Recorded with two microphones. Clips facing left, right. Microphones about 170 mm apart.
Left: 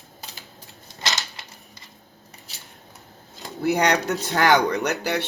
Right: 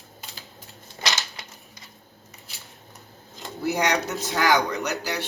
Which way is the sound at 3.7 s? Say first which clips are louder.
Left 4 dB; 60° left (ahead or behind).